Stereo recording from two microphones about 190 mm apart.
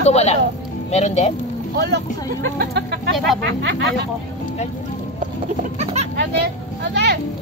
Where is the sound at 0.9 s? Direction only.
35° left (ahead or behind).